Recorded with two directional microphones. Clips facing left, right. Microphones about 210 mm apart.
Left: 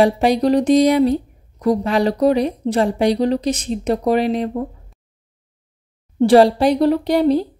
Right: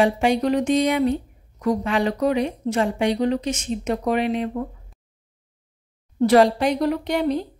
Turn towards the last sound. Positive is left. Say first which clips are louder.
# left 7 dB
turn(degrees=35)  # may be behind; listen again after turning